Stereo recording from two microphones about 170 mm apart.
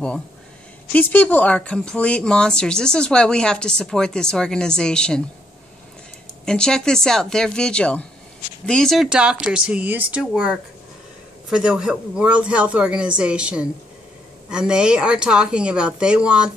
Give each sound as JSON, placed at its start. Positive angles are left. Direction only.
{"t": 0.9, "sound": "speech", "side_deg": 10}
{"t": 6.4, "sound": "speech", "side_deg": 5}